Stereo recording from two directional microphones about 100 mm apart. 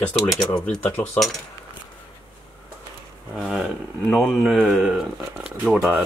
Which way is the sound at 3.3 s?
5° right (ahead or behind).